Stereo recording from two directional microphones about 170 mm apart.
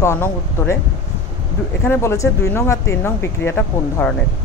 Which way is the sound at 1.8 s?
15° left (ahead or behind).